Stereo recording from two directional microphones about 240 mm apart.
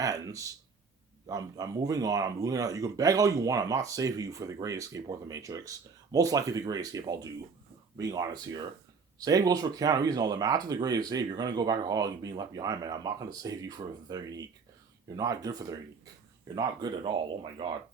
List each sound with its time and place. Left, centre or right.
0.0 s speech: centre